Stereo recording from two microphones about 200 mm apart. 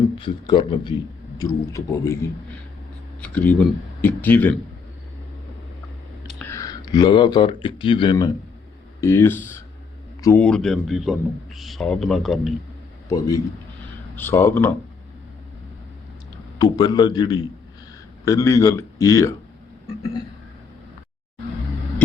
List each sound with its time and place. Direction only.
0.2 s a man's voice: 25° left (ahead or behind)
3.2 s a man's voice: 5° left (ahead or behind)
6.4 s a man's voice: 15° left (ahead or behind)
10.4 s a man's voice: 5° left (ahead or behind)
13.1 s a man's voice: 15° left (ahead or behind)
16.6 s a man's voice: 20° left (ahead or behind)